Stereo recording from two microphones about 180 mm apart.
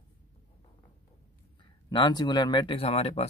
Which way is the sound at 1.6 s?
25° left (ahead or behind).